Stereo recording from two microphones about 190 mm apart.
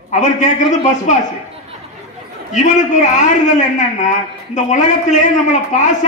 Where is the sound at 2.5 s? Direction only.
40° left (ahead or behind).